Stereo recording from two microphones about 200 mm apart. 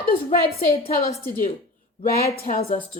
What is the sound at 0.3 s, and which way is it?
Speech, 45° left (ahead or behind).